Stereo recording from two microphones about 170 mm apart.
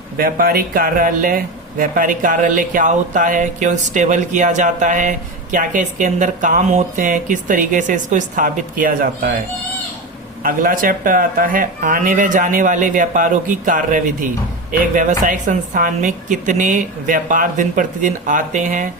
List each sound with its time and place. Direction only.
0.2 s speech: 60° right (ahead or behind)
10.4 s speech: 55° right (ahead or behind)